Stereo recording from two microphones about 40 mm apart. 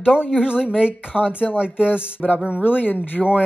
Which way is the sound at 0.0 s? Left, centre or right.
Right.